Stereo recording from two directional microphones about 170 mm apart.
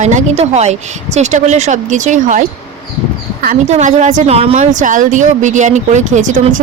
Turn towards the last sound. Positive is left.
turn(degrees=-45)  # may be behind; listen again after turning